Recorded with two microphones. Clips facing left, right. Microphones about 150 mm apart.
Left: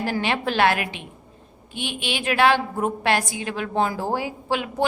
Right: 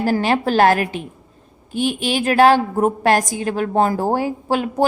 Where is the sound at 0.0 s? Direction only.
40° right (ahead or behind).